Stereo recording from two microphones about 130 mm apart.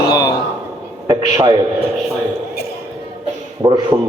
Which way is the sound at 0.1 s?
30° left (ahead or behind).